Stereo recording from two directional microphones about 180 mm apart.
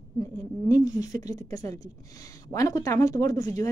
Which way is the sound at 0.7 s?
20° left (ahead or behind).